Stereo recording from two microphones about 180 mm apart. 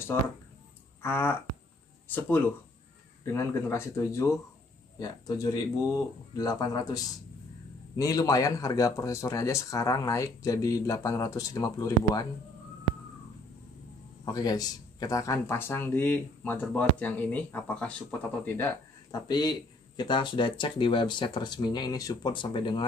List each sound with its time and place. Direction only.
1.0 s speech: 10° left (ahead or behind)
14.2 s speech: 20° left (ahead or behind)
19.2 s speech: 25° left (ahead or behind)